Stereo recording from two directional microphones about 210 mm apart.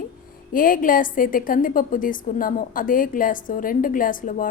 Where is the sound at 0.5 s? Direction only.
40° left (ahead or behind).